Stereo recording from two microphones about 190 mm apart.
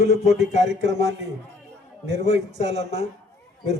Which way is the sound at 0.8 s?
65° right (ahead or behind).